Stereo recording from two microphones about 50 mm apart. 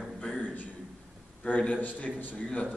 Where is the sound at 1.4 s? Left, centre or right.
Left.